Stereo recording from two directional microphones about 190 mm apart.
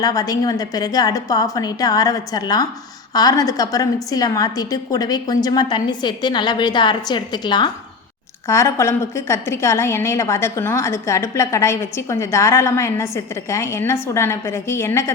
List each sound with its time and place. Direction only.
0.0 s a woman's voice: 20° left (ahead or behind)